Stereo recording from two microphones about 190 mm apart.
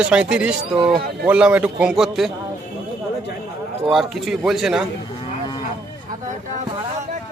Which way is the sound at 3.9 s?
Centre (ahead or behind).